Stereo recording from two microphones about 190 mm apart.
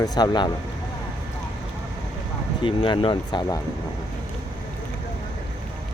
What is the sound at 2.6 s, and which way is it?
Speech, 25° left (ahead or behind).